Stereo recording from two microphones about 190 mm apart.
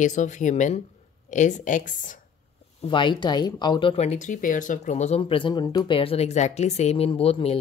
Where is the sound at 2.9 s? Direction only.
25° left (ahead or behind).